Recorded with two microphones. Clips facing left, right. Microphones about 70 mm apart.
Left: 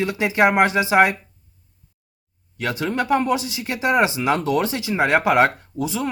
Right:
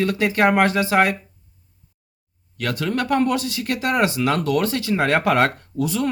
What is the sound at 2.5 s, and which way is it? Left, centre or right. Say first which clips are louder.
Speech: even; left.